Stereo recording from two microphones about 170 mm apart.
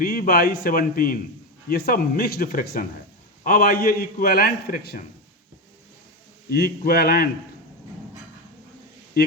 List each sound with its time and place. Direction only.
0.0 s a man's voice: 65° left (ahead or behind)
6.5 s a man's voice: 65° left (ahead or behind)